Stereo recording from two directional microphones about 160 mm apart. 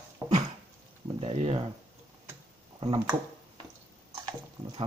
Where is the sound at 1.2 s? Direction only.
40° right (ahead or behind).